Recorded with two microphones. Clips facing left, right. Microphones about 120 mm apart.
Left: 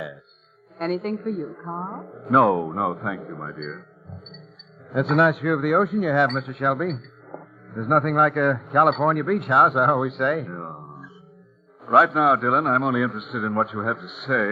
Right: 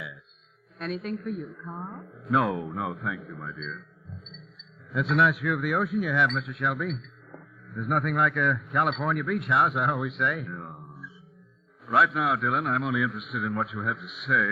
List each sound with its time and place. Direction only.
0.8 s speech: 50° left (ahead or behind)
4.9 s speech: 45° left (ahead or behind)